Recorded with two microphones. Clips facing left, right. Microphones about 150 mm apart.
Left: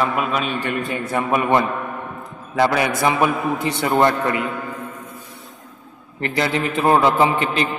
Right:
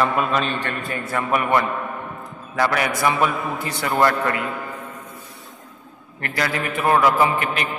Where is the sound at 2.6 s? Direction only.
25° left (ahead or behind).